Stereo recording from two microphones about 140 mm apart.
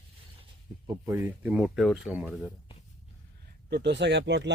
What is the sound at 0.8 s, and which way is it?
Speech, 25° right (ahead or behind).